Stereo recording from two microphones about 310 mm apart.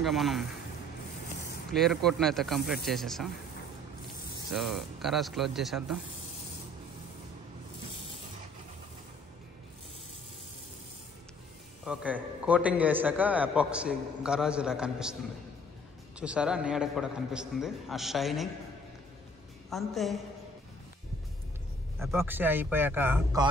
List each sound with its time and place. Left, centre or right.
0.0 s a man's voice: centre
1.7 s a man's voice: centre
4.5 s a man's voice: centre
11.8 s a man's voice: centre
16.2 s a man's voice: centre
19.7 s a man's voice: centre
21.9 s a man's voice: centre